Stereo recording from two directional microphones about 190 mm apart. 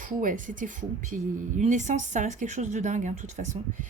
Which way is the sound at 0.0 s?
45° right (ahead or behind).